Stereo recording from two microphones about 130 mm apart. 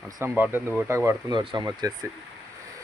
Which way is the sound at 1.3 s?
35° right (ahead or behind).